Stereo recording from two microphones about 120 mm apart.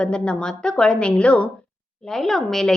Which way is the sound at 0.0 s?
5° left (ahead or behind).